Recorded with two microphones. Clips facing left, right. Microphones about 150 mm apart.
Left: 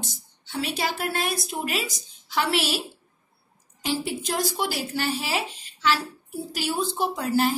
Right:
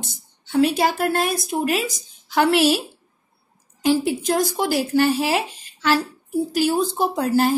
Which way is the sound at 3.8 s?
45° right (ahead or behind).